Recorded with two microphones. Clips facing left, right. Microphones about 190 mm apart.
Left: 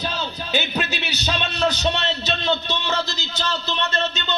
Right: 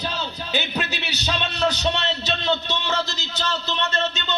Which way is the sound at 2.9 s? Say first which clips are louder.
Left 1 dB; 35° left (ahead or behind).